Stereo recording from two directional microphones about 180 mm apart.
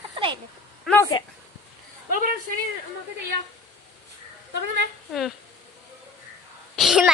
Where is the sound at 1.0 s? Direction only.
20° left (ahead or behind).